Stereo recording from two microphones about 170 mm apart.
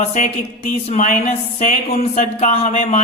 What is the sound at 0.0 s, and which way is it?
A woman's voice, 45° left (ahead or behind).